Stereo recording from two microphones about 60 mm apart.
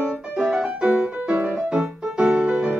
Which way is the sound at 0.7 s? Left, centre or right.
Centre.